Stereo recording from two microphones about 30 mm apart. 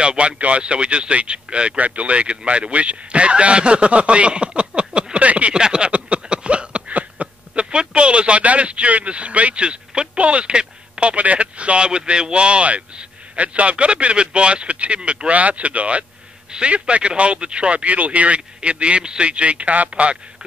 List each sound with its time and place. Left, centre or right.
0.0 s speech: right
0.4 s speech: right
1.8 s speech: right
5.1 s a sound: right
5.5 s speech: right
5.9 s a sound: right
6.9 s a sound: right
7.9 s speech: right
9.6 s speech: right
15.0 s speech: right
15.2 s speech: right
19.9 s speech: right